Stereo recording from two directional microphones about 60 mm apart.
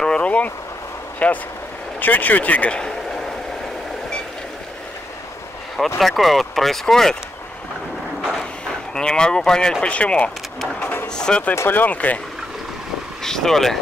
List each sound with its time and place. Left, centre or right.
0.0 s vehicle: centre
1.2 s speech: left
3.1 s a sound: centre
5.9 s speech: centre
8.9 s speech: centre
11.5 s speech: left
13.2 s speech: centre